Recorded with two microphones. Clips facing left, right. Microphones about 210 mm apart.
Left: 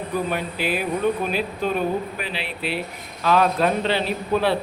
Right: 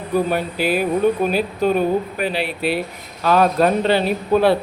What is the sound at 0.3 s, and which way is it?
Mantra, 40° right (ahead or behind).